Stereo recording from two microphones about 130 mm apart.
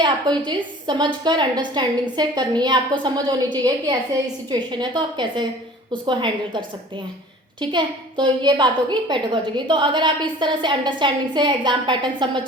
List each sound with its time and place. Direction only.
0.0 s a child's voice: 35° right (ahead or behind)